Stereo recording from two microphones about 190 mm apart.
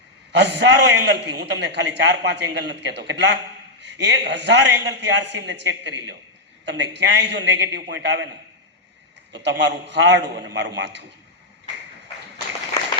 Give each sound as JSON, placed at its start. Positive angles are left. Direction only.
{"t": 0.3, "sound": "a man's voice", "side_deg": -65}
{"t": 9.3, "sound": "a man's voice", "side_deg": -65}